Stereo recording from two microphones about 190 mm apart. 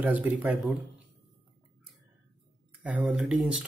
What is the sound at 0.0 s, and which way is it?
Speech, 10° right (ahead or behind).